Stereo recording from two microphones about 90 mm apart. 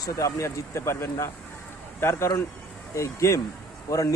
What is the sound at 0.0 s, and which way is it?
Speech, 35° left (ahead or behind).